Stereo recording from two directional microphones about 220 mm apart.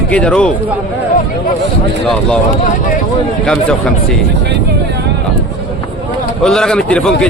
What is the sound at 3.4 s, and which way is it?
Speech, 5° left (ahead or behind).